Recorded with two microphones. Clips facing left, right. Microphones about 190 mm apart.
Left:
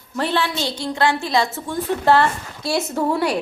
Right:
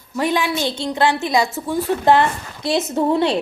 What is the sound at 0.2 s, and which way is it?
A woman's voice, 15° right (ahead or behind).